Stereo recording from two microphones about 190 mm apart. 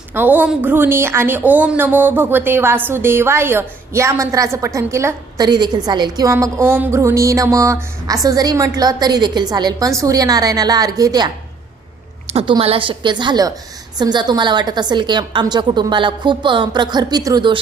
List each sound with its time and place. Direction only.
0.1 s a woman's voice: 10° right (ahead or behind)
12.3 s a woman's voice: 30° right (ahead or behind)